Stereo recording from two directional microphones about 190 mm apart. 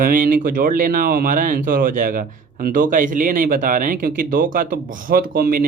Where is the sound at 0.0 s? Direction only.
45° right (ahead or behind).